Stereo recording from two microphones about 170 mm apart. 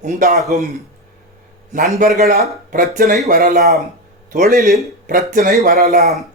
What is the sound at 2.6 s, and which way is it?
Speech, 55° right (ahead or behind).